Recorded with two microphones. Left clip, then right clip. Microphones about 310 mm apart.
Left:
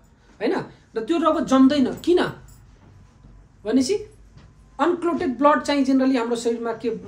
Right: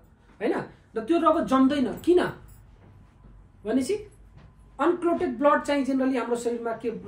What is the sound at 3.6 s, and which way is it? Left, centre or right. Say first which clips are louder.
Speech: left 5 dB; centre.